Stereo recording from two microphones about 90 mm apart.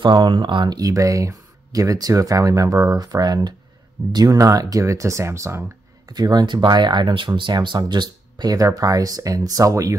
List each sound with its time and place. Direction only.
0.0 s speech: 60° right (ahead or behind)
0.7 s speech: 40° right (ahead or behind)
6.0 s speech: 50° right (ahead or behind)